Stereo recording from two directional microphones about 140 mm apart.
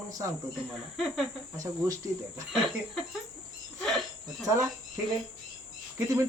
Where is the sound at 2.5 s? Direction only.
Centre (ahead or behind).